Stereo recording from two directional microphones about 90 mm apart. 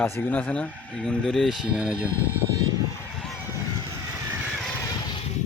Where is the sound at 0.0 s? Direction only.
20° left (ahead or behind).